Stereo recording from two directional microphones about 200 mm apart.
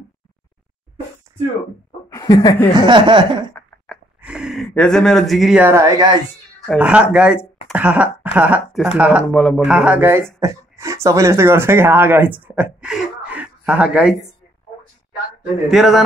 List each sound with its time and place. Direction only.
2.0 s speech: 15° left (ahead or behind)
2.7 s speech: 20° right (ahead or behind)
3.5 s a sound: 5° left (ahead or behind)
4.2 s speech: 5° right (ahead or behind)
6.8 s speech: 5° right (ahead or behind)
15.7 s a man's voice: centre (ahead or behind)